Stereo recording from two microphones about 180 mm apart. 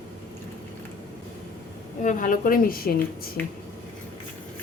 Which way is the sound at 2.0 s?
45° left (ahead or behind).